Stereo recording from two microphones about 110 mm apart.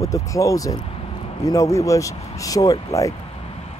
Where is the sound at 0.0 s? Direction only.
30° left (ahead or behind).